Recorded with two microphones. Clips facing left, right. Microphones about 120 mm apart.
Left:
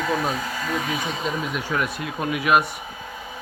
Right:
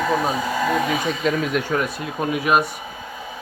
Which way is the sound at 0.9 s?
75° right (ahead or behind).